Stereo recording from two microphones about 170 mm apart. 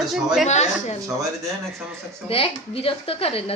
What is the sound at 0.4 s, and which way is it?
Speech, 40° left (ahead or behind).